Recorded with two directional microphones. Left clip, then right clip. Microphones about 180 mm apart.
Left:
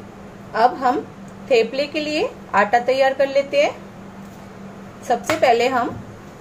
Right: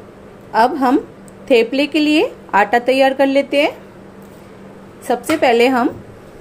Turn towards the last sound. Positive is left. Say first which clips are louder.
# right 3 dB
turn(degrees=-55)  # may be behind; listen again after turning